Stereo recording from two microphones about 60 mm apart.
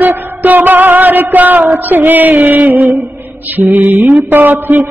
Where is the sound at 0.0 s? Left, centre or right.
Right.